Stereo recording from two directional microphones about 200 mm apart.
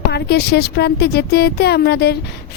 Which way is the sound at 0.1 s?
55° left (ahead or behind).